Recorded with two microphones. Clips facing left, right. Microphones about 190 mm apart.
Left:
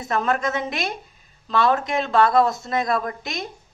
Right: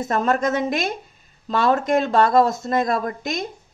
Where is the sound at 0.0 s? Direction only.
45° right (ahead or behind).